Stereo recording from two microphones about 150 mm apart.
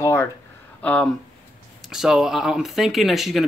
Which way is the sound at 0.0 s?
20° left (ahead or behind).